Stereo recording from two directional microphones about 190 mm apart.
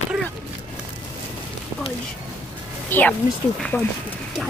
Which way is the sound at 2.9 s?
10° left (ahead or behind).